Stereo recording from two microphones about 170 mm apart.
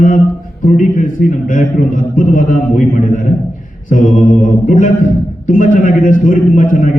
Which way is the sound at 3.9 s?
50° left (ahead or behind).